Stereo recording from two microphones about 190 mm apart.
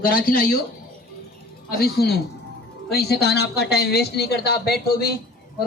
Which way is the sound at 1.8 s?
55° left (ahead or behind).